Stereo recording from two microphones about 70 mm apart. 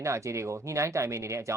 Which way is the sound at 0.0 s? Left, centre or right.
Right.